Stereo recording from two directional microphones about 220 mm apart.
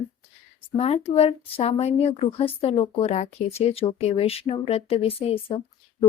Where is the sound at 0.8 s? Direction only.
25° left (ahead or behind).